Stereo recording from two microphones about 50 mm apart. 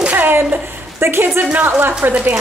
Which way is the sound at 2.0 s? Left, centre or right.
Right.